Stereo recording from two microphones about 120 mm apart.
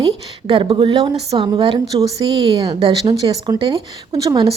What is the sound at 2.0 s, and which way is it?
Speech, 30° right (ahead or behind).